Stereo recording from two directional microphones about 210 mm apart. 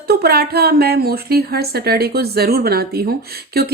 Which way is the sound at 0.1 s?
50° right (ahead or behind).